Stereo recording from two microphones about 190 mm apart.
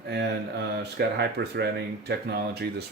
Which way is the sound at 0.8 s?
60° right (ahead or behind).